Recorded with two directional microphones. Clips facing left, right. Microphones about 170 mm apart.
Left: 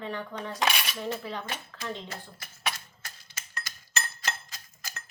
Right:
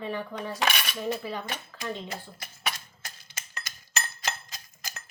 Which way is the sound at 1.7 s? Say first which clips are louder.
Right 4 dB; 5° right (ahead or behind).